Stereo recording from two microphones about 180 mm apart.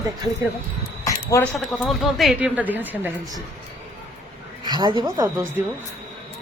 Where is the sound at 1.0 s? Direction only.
15° left (ahead or behind).